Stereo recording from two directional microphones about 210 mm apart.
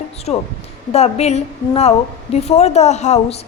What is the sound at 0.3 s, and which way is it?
A woman's voice, 30° left (ahead or behind).